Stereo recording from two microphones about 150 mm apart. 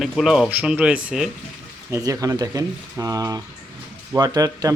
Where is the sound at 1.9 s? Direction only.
20° right (ahead or behind).